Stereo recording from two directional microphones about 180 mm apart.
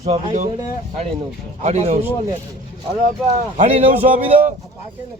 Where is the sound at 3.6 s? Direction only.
40° right (ahead or behind).